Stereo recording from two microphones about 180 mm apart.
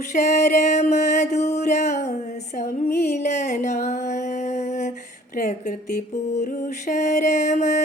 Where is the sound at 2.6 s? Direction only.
50° left (ahead or behind).